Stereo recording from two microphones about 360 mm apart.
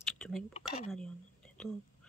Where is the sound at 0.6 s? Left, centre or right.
Centre.